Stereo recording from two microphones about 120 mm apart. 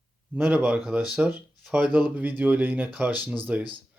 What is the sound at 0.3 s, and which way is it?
Speech, 10° right (ahead or behind).